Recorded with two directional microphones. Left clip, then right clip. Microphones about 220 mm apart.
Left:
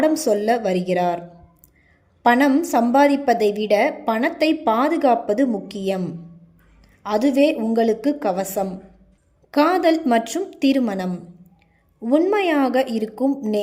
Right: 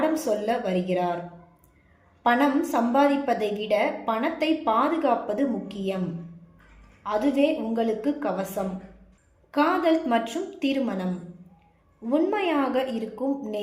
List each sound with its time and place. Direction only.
0.0 s a woman's voice: 50° left (ahead or behind)
2.2 s a woman's voice: 50° left (ahead or behind)
7.0 s a woman's voice: 50° left (ahead or behind)